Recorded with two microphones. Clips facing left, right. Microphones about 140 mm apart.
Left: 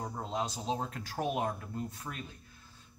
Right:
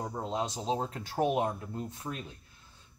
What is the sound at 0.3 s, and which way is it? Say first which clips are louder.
Speech: right 2 dB; 30° right (ahead or behind).